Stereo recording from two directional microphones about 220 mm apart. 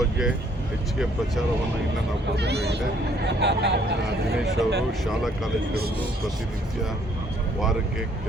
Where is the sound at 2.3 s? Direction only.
50° right (ahead or behind).